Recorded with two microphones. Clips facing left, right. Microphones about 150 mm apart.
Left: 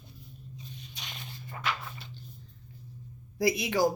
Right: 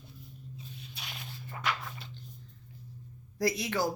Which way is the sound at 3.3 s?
15° left (ahead or behind).